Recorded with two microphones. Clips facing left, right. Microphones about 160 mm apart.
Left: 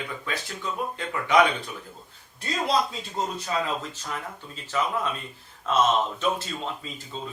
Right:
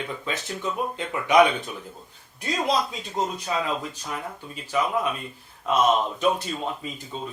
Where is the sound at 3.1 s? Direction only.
15° right (ahead or behind).